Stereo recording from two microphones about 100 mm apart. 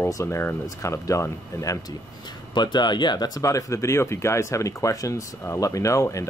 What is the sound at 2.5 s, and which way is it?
Speech, 45° left (ahead or behind).